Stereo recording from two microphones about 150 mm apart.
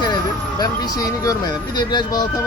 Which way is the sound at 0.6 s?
25° left (ahead or behind).